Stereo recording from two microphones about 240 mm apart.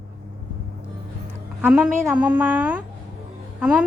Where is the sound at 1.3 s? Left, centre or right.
Centre.